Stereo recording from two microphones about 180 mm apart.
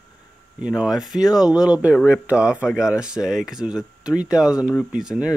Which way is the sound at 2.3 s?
5° right (ahead or behind).